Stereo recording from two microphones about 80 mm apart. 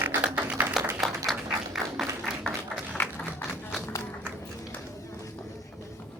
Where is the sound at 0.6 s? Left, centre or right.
Centre.